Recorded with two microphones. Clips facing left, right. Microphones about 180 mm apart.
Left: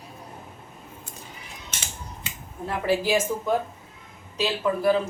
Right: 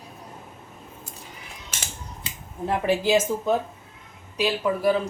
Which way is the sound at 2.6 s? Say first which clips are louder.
Right 2 dB; 20° right (ahead or behind).